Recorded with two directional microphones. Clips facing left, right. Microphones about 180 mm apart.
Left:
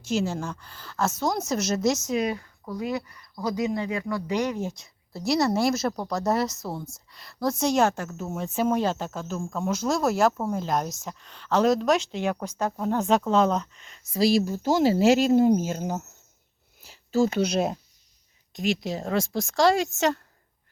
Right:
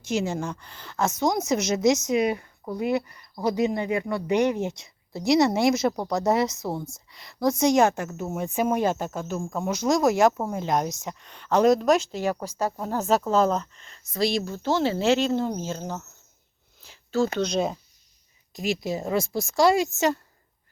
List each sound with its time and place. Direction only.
0.1 s a woman's voice: 15° right (ahead or behind)
14.2 s speech: 5° left (ahead or behind)
16.8 s a sound: 5° left (ahead or behind)
17.3 s speech: 5° left (ahead or behind); by 20.1 s 10° right (ahead or behind)